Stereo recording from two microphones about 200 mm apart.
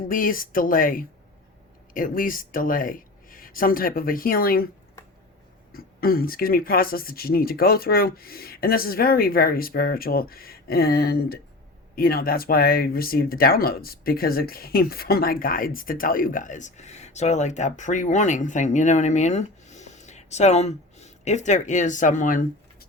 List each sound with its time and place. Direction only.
0.1 s speech: 45° left (ahead or behind)
5.7 s speech: 50° left (ahead or behind)